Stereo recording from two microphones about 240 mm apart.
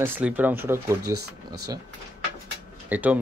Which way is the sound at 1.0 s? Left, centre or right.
Right.